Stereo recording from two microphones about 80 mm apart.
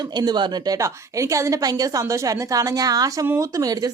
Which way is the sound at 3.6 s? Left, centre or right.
Right.